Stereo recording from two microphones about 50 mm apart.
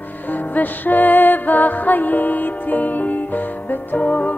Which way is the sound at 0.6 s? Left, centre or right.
Left.